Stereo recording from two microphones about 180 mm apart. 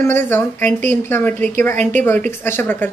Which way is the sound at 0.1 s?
10° left (ahead or behind).